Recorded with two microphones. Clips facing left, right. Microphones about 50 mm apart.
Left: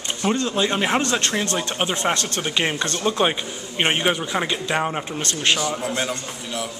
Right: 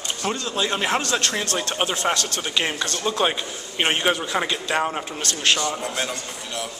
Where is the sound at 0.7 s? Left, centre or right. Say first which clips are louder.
Even; centre.